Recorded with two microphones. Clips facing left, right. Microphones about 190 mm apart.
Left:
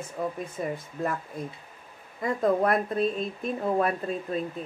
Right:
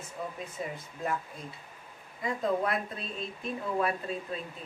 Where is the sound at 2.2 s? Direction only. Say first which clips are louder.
Left 6 dB; 50° left (ahead or behind).